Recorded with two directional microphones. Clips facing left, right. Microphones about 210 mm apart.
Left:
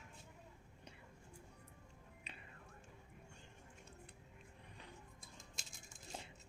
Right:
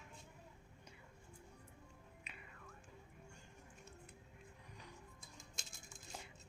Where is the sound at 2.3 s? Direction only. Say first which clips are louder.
Left 2 dB; 30° left (ahead or behind).